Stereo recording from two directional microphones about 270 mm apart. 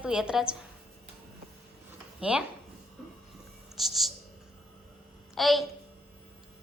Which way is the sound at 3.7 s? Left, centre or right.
Centre.